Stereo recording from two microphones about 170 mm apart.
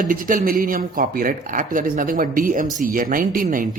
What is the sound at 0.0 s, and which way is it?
Speech, 55° right (ahead or behind).